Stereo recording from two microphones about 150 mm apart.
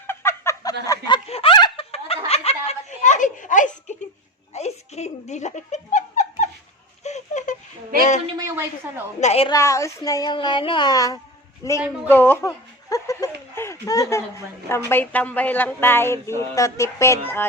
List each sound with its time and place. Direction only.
0.1 s a sound: 15° left (ahead or behind)
1.3 s speech: 40° left (ahead or behind); by 3.9 s 55° left (ahead or behind)
4.5 s speech: 45° left (ahead or behind)
7.0 s a sound: 50° left (ahead or behind)
8.4 s a woman's voice: 15° right (ahead or behind)
9.2 s a woman's voice: 45° left (ahead or behind)
9.5 s speech: 20° left (ahead or behind)
12.0 s chuckle: 15° left (ahead or behind)
14.8 s music: 10° left (ahead or behind)